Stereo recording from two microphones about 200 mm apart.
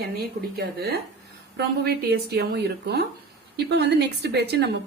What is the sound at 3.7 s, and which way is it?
A woman's voice, 60° right (ahead or behind).